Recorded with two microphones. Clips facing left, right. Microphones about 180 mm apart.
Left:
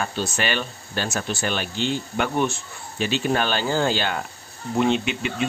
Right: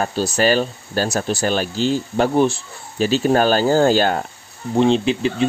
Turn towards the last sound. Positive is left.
turn(degrees=-35)  # may be behind; listen again after turning